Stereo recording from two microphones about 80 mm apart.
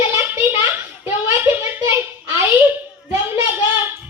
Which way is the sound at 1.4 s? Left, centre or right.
Right.